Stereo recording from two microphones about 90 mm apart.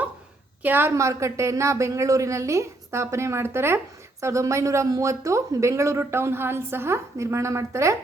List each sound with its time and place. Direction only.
0.6 s speech: 25° right (ahead or behind)